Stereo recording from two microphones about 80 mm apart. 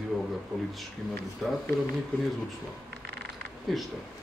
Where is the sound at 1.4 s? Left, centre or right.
Centre.